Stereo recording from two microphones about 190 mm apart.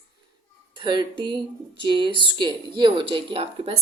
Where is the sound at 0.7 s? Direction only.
25° right (ahead or behind).